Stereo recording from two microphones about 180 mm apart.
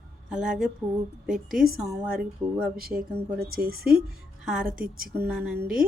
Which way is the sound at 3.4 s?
55° right (ahead or behind).